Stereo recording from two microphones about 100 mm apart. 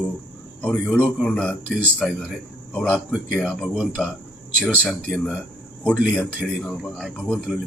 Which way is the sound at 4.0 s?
5° left (ahead or behind).